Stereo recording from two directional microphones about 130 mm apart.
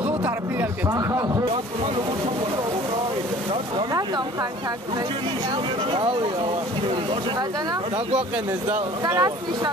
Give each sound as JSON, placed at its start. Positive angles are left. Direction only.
{"t": 0.0, "sound": "a sound", "side_deg": -15}
{"t": 0.8, "sound": "speech", "side_deg": -25}
{"t": 5.9, "sound": "speech", "side_deg": -40}
{"t": 9.1, "sound": "speech", "side_deg": -25}